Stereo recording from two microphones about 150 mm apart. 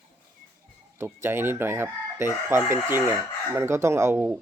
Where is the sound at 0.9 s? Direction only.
15° right (ahead or behind).